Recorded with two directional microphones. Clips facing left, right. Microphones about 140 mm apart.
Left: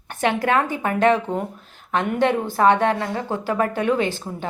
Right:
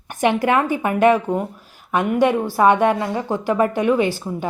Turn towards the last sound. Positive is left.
turn(degrees=-10)  # may be behind; listen again after turning